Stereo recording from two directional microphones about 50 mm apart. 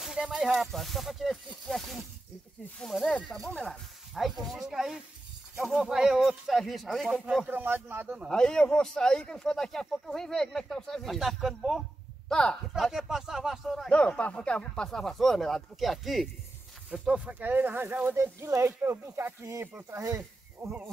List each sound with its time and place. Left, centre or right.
0.0 s speech: centre
2.9 s speech: centre
3.4 s speech: centre
7.4 s speech: right
8.3 s speech: centre
11.1 s speech: centre
12.3 s speech: centre
12.9 s speech: centre
13.8 s speech: left; by 16.3 s centre
16.9 s speech: centre
17.2 s speech: right
18.1 s speech: right
18.8 s speech: right
20.6 s speech: right